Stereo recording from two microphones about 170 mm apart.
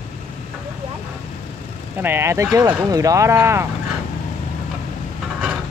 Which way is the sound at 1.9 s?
15° right (ahead or behind).